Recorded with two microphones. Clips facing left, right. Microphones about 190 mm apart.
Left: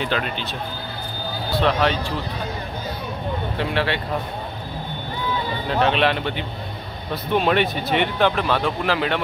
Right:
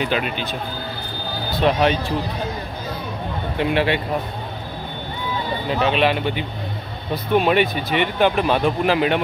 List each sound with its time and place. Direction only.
0.0 s speech: 15° right (ahead or behind)
1.6 s speech: 15° right (ahead or behind)
3.5 s speech: 15° right (ahead or behind)
5.7 s speech: 5° right (ahead or behind)
8.4 s speech: 15° right (ahead or behind)